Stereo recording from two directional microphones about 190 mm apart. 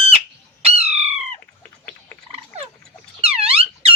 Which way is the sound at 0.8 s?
35° right (ahead or behind).